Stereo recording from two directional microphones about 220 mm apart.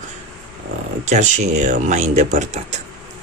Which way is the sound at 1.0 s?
30° right (ahead or behind).